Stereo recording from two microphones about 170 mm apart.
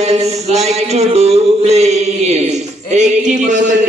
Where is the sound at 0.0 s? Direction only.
40° right (ahead or behind).